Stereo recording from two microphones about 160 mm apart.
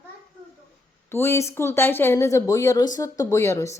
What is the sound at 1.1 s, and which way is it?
Speech, 15° left (ahead or behind).